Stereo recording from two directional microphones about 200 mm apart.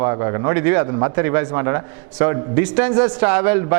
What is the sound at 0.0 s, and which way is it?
A man's voice, 20° right (ahead or behind).